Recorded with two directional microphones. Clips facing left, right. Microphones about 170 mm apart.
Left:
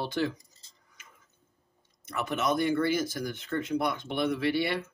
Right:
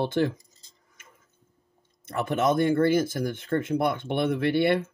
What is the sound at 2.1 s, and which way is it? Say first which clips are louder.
Speech: right 5 dB; 25° right (ahead or behind).